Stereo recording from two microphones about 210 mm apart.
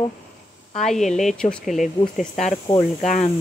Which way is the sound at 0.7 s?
Centre (ahead or behind).